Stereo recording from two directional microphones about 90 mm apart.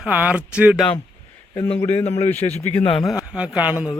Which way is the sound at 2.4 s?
70° left (ahead or behind).